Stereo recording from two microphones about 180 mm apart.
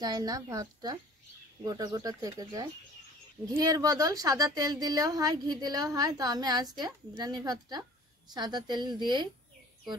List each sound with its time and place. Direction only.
0.0 s speech: 20° right (ahead or behind)